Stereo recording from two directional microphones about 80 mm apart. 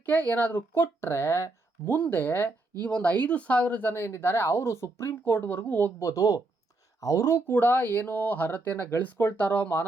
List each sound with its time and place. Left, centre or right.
0.0 s speech: left
6.0 s a woman's voice: left